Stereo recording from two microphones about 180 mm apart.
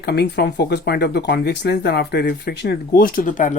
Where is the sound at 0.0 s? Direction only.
65° left (ahead or behind).